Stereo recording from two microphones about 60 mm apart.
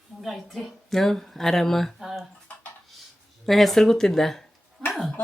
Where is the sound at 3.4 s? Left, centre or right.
Centre.